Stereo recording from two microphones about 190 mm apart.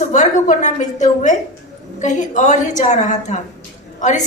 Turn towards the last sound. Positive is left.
turn(degrees=40)  # may be behind; listen again after turning